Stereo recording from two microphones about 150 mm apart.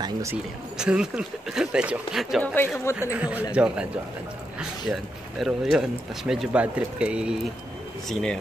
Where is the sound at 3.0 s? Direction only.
10° right (ahead or behind).